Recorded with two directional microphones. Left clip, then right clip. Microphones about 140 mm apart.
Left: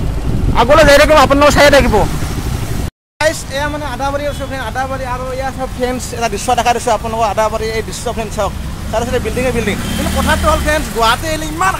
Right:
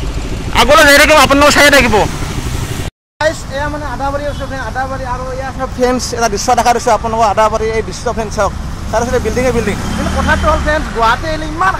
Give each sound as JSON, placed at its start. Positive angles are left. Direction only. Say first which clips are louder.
{"t": 0.6, "sound": "a man's voice", "louder": "right 1 dB", "side_deg": 5}
{"t": 3.2, "sound": "speech", "louder": "even", "side_deg": 15}
{"t": 6.1, "sound": "speech", "louder": "even", "side_deg": -20}
{"t": 10.1, "sound": "speech", "louder": "right 1 dB", "side_deg": 25}